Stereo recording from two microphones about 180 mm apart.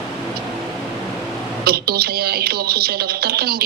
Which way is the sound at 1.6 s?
60° right (ahead or behind).